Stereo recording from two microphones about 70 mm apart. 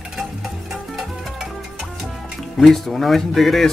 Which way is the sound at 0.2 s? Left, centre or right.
Centre.